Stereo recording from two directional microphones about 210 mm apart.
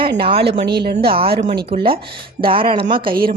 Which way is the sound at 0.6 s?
50° right (ahead or behind).